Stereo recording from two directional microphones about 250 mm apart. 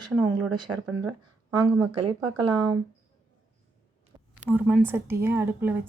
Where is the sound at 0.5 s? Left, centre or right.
Centre.